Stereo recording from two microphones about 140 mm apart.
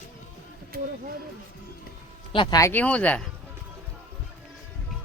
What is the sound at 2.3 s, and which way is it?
Speech, 35° left (ahead or behind).